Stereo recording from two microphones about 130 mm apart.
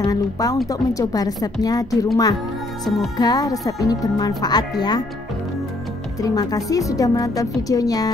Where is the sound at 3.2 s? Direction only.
30° left (ahead or behind).